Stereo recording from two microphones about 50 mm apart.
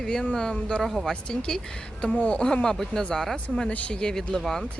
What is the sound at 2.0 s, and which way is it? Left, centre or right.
Speech, left.